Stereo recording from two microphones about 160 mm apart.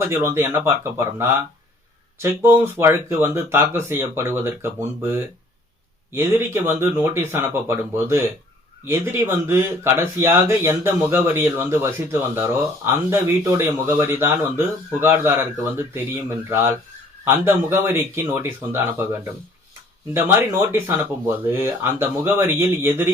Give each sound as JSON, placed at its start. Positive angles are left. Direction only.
{"t": 0.1, "sound": "speech", "side_deg": -15}
{"t": 20.1, "sound": "speech", "side_deg": -15}